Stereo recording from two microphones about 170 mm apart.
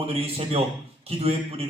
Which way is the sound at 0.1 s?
35° right (ahead or behind).